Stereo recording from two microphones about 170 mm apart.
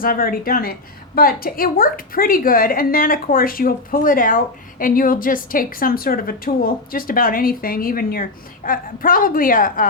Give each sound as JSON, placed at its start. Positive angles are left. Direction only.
{"t": 0.0, "sound": "a woman's voice", "side_deg": 55}